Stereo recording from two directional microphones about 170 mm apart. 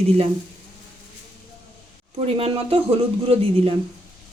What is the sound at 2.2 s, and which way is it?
Speech, 35° right (ahead or behind).